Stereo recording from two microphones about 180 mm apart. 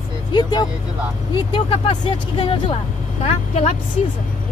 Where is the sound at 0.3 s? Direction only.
25° left (ahead or behind).